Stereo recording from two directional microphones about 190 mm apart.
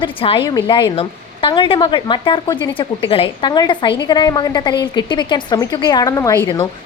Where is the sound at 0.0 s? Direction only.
25° left (ahead or behind).